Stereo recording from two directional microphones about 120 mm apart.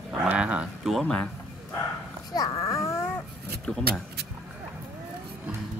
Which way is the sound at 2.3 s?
30° left (ahead or behind).